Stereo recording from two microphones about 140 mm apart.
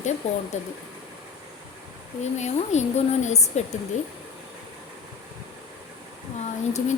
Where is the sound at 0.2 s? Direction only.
50° left (ahead or behind).